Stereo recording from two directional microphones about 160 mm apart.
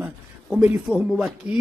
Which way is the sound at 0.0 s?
5° right (ahead or behind).